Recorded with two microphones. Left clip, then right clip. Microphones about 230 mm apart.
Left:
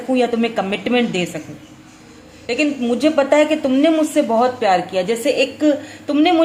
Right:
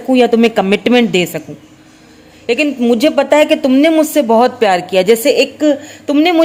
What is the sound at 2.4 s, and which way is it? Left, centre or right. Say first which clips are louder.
A woman's voice: right 6 dB; right.